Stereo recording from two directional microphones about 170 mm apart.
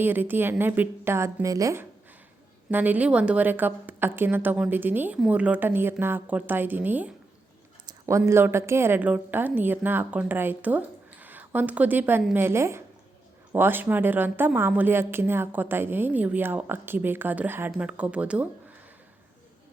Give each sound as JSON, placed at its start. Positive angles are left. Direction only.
{"t": 0.0, "sound": "a woman's voice", "side_deg": -10}
{"t": 7.9, "sound": "a sound", "side_deg": -15}
{"t": 8.3, "sound": "a woman's voice", "side_deg": -15}